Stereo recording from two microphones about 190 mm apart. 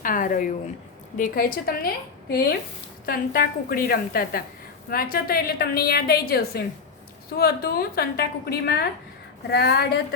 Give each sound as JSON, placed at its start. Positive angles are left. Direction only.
{"t": 0.0, "sound": "a woman's voice", "side_deg": 45}